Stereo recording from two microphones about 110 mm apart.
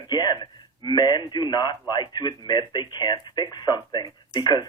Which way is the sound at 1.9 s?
40° left (ahead or behind).